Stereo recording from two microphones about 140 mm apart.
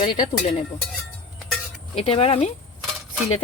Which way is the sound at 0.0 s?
70° left (ahead or behind).